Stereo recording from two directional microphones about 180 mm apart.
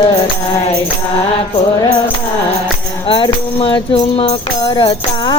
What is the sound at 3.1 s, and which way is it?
Music, 30° left (ahead or behind).